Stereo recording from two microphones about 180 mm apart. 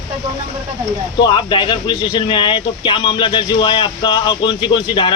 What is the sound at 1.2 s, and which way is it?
Speech, 25° left (ahead or behind).